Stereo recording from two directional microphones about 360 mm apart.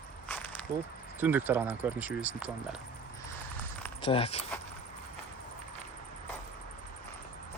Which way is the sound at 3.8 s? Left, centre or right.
Centre.